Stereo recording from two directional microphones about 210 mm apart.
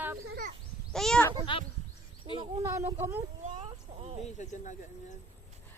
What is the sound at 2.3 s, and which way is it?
Speech, 30° right (ahead or behind).